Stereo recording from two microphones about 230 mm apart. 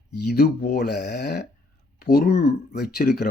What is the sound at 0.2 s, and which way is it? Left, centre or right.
Speech, left.